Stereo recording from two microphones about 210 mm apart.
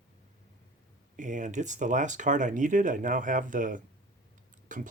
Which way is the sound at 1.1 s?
35° right (ahead or behind).